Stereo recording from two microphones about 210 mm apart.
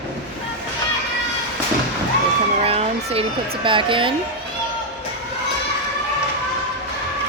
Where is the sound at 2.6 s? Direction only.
30° right (ahead or behind).